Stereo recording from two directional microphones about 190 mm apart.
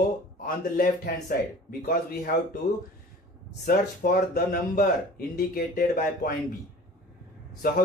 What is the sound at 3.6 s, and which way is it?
Speech, 50° left (ahead or behind).